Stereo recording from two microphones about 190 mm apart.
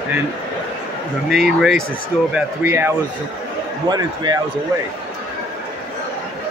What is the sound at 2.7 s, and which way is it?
Speech, 10° right (ahead or behind).